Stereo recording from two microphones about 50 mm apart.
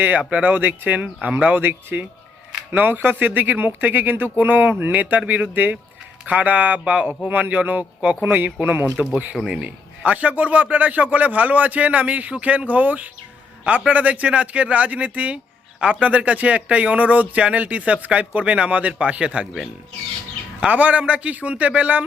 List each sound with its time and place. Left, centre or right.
0.0 s a man's voice: right
8.2 s a man's voice: right
9.5 s a man's voice: right
20.7 s speech: right